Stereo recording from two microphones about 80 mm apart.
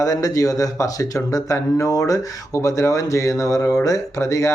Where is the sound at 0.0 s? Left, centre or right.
Left.